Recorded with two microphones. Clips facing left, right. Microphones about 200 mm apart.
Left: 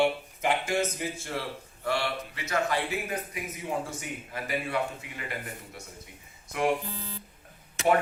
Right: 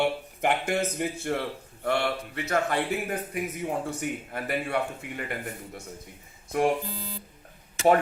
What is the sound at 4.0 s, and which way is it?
Speech, 60° right (ahead or behind).